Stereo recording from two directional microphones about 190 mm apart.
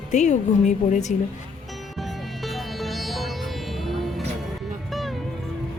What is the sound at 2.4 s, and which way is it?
Music, centre (ahead or behind).